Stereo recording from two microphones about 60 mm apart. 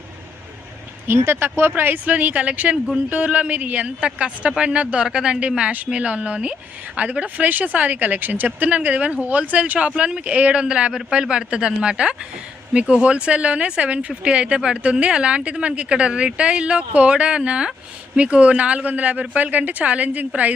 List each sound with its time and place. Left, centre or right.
1.0 s a woman's voice: right